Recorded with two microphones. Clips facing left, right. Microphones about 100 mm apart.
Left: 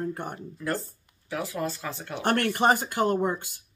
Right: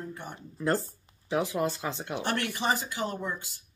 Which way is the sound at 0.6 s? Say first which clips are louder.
Right 4 dB; 20° right (ahead or behind).